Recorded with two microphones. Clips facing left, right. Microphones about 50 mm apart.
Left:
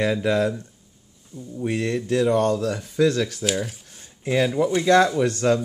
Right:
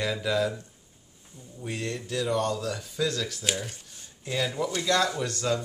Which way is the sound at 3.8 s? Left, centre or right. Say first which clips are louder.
Left 10 dB; left.